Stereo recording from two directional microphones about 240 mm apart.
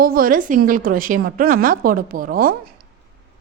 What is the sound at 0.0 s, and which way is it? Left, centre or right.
A woman's voice, right.